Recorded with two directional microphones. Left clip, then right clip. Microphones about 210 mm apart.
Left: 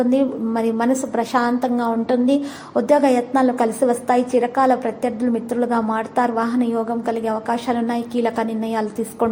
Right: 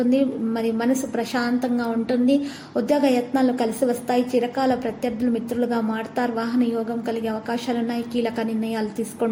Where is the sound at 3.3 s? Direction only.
5° left (ahead or behind).